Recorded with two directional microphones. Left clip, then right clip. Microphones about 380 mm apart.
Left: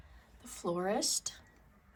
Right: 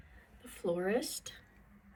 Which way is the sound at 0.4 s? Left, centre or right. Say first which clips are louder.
Even; centre.